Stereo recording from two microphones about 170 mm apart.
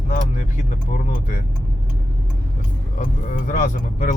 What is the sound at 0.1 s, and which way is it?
Speech, 45° left (ahead or behind).